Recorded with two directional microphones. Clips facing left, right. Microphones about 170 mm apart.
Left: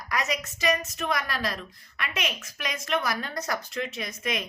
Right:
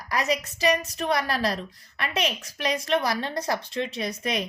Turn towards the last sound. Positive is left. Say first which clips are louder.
# right 4 dB
turn(degrees=-35)  # may be behind; listen again after turning